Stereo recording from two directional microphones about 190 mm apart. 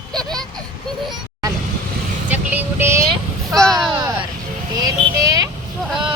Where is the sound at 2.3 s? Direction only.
10° right (ahead or behind).